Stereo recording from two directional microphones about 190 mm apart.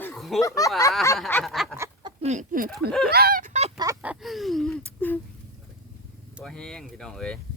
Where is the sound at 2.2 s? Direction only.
40° right (ahead or behind).